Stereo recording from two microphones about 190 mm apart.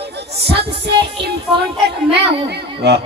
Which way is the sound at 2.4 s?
60° right (ahead or behind).